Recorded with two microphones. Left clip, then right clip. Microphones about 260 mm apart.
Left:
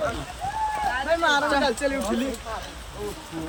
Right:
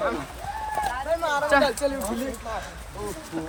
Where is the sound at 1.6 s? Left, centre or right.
Right.